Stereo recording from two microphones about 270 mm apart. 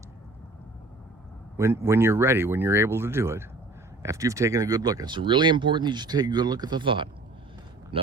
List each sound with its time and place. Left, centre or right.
1.5 s speech: centre